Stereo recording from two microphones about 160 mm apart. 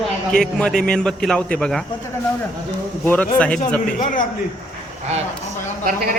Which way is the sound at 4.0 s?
55° left (ahead or behind).